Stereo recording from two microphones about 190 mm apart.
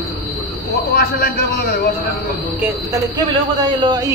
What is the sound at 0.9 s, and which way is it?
Speech, 55° left (ahead or behind).